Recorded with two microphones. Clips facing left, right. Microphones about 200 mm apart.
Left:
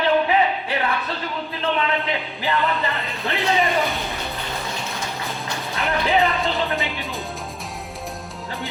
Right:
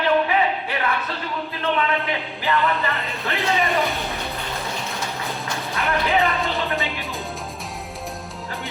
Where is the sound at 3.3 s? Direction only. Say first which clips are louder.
Left 1 dB; centre (ahead or behind).